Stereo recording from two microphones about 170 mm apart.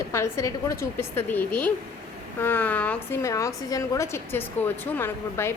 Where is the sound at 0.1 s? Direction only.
15° left (ahead or behind).